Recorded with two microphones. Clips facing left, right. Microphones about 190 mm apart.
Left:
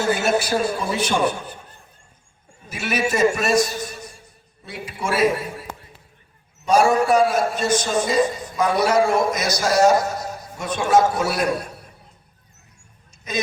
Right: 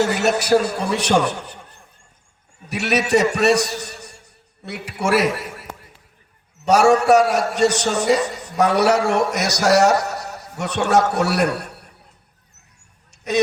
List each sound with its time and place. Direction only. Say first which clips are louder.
0.0 s a man's voice: right 1 dB; 70° right (ahead or behind)
2.6 s a man's voice: right 3 dB; 70° right (ahead or behind)
6.7 s a man's voice: right 3 dB; 75° right (ahead or behind)